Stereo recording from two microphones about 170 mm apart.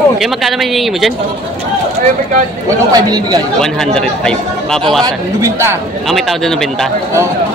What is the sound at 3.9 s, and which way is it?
Speech, 5° left (ahead or behind).